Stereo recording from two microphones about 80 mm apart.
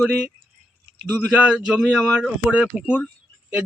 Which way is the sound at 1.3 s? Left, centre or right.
Centre.